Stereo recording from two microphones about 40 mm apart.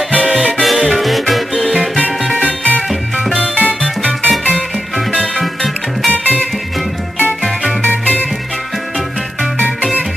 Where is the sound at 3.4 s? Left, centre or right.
Left.